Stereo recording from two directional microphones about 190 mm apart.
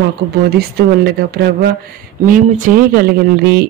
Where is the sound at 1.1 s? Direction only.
55° right (ahead or behind).